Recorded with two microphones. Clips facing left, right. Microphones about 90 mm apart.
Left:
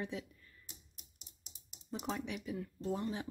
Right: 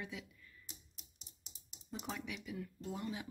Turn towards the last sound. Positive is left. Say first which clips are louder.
# left 5 dB
turn(degrees=35)  # may be behind; listen again after turning